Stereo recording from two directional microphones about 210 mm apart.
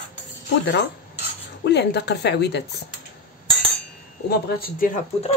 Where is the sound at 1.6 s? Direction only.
55° left (ahead or behind).